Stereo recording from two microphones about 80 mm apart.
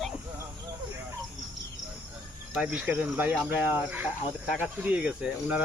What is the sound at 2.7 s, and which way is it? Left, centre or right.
Speech, centre.